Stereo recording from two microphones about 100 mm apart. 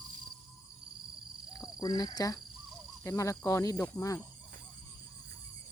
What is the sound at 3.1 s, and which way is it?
Speech, 30° left (ahead or behind).